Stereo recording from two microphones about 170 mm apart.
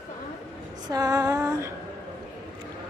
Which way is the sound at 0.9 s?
20° right (ahead or behind).